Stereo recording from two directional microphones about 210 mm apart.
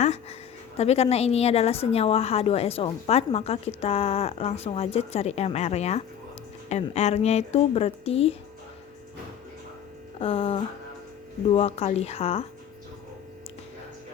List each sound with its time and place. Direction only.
0.0 s a sound: 30° left (ahead or behind)
0.8 s a woman's voice: 30° left (ahead or behind)
10.2 s a woman's voice: 25° left (ahead or behind)